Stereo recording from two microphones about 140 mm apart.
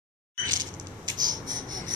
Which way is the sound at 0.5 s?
30° right (ahead or behind).